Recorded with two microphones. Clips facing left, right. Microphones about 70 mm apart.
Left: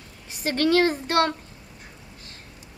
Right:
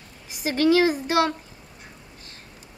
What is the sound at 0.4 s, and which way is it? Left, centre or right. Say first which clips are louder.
Speech: right 1 dB; centre.